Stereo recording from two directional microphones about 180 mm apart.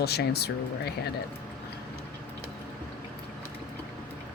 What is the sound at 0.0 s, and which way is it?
Speech, 60° left (ahead or behind).